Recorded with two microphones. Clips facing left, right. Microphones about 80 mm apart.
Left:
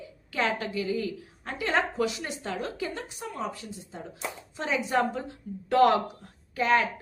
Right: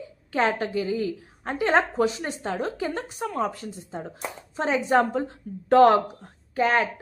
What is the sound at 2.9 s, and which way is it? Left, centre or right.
Speech, right.